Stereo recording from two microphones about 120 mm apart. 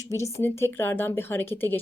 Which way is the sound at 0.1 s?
25° left (ahead or behind).